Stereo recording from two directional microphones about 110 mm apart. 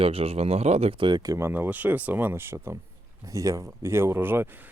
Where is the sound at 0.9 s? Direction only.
45° right (ahead or behind).